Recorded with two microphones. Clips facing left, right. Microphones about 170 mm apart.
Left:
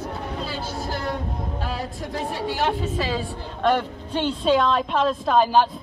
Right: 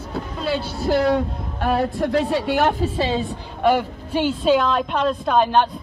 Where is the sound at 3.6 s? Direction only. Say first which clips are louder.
Right 3 dB; 10° right (ahead or behind).